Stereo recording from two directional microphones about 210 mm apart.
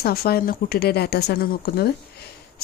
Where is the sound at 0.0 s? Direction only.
45° left (ahead or behind).